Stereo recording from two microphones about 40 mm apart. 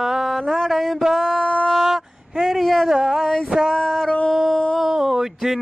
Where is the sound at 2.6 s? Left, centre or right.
Centre.